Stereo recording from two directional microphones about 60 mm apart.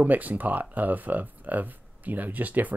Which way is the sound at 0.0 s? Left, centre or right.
Right.